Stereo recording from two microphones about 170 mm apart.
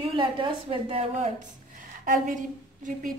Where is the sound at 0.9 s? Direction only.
40° right (ahead or behind).